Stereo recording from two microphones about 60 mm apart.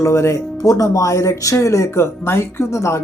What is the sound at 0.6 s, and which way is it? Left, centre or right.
Speech, left.